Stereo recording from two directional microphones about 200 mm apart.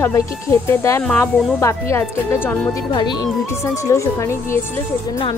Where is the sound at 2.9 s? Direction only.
20° left (ahead or behind).